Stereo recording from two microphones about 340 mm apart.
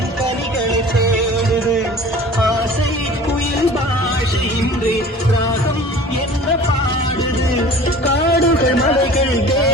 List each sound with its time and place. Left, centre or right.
8.0 s music: left